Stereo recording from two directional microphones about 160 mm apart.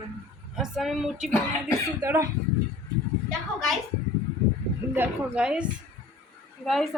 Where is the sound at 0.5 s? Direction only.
5° right (ahead or behind).